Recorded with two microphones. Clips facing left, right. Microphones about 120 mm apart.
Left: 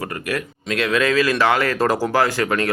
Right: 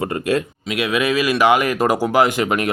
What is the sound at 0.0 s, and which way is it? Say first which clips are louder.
Speech: right 6 dB; 25° right (ahead or behind).